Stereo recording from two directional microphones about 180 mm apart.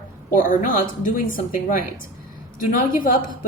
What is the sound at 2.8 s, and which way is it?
Speech, 45° left (ahead or behind).